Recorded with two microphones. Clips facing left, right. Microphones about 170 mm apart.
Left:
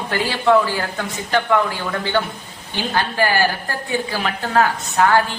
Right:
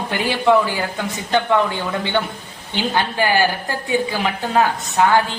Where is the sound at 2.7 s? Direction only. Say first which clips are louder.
Right 1 dB; 20° right (ahead or behind).